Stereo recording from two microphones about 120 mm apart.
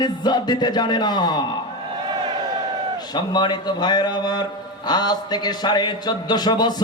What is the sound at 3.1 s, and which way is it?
A man's voice, 35° left (ahead or behind).